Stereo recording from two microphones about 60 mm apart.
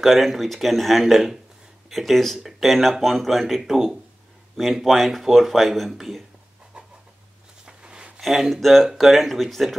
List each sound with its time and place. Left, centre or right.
0.0 s speech: centre
7.6 s a sound: centre
8.2 s speech: centre